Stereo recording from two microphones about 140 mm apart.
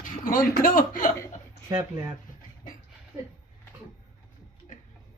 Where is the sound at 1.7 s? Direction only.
20° right (ahead or behind).